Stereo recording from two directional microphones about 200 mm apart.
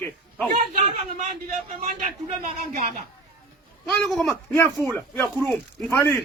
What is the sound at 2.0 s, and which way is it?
Speech, 35° right (ahead or behind).